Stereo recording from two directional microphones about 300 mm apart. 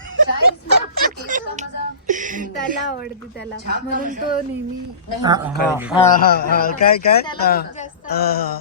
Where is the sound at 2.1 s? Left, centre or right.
Right.